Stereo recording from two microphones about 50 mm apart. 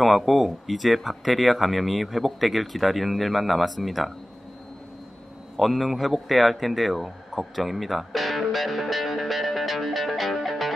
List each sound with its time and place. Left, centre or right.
0.0 s speech: centre
5.6 s speech: centre